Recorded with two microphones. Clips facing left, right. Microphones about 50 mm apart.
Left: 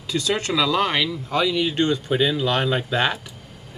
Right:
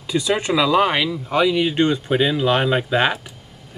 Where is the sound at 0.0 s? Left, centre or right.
Centre.